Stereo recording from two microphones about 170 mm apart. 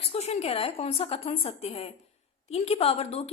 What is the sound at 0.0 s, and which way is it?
A woman's voice, 35° left (ahead or behind).